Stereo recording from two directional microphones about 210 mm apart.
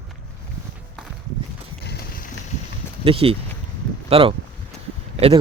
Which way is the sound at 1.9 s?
45° left (ahead or behind).